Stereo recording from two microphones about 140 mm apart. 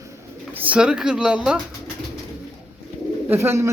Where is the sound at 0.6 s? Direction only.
10° right (ahead or behind).